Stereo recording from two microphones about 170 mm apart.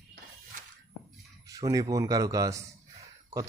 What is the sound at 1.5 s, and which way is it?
A man's voice, 20° right (ahead or behind).